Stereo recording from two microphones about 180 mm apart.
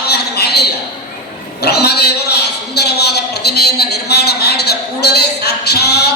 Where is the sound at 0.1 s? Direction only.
65° left (ahead or behind).